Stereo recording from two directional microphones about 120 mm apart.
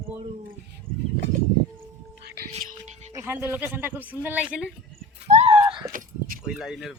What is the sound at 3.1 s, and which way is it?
A woman's voice, 15° right (ahead or behind).